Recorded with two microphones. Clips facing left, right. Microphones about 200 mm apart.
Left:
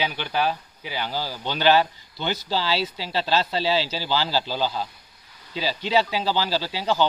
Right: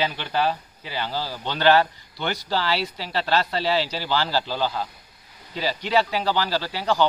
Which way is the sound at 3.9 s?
10° left (ahead or behind).